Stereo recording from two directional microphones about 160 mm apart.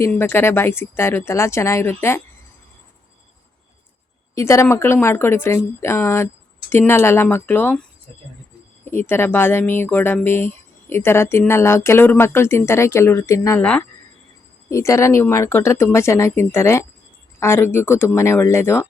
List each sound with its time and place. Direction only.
0.0 s speech: 15° left (ahead or behind)
4.4 s speech: 20° left (ahead or behind)
8.8 s speech: 15° left (ahead or behind)